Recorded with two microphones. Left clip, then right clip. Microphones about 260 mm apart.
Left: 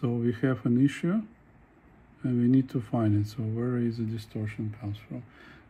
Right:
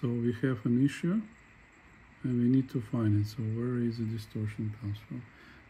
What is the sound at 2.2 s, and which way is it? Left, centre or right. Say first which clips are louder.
Speech: left 3 dB; left.